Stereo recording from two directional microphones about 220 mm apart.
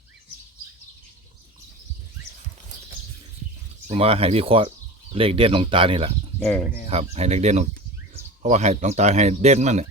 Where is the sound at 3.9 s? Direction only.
25° right (ahead or behind).